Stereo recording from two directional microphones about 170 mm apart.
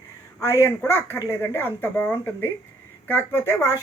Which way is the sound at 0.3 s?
15° left (ahead or behind).